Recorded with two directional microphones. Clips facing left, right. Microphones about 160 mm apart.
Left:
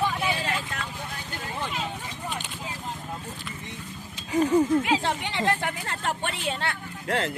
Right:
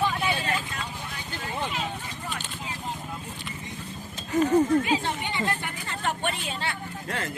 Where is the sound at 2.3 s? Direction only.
15° left (ahead or behind).